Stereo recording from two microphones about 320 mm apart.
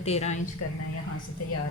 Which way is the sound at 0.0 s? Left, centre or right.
Centre.